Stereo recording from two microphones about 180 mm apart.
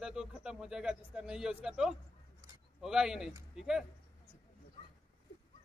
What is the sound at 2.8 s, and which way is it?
Speech, 5° right (ahead or behind).